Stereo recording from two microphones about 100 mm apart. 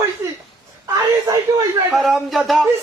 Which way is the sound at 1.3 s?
30° right (ahead or behind).